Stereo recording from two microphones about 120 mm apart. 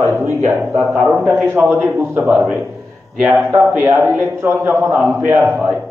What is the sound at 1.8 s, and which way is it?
A man's voice, 15° right (ahead or behind).